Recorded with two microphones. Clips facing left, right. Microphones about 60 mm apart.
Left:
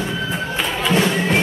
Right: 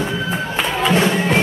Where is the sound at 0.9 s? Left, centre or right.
Right.